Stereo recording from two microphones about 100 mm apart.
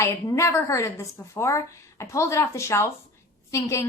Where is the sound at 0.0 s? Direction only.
30° left (ahead or behind).